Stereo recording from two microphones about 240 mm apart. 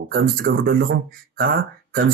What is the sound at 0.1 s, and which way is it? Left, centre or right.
Speech, right.